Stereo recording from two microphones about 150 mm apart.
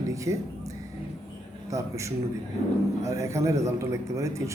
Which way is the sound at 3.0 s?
20° right (ahead or behind).